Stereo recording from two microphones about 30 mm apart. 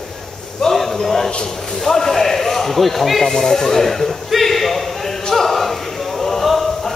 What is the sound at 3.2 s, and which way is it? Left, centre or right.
Speech, centre.